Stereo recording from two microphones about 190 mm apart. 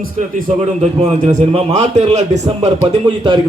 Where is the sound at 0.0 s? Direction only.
45° right (ahead or behind).